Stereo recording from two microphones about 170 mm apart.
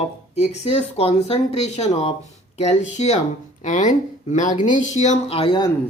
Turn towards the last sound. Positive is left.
turn(degrees=30)  # may be behind; listen again after turning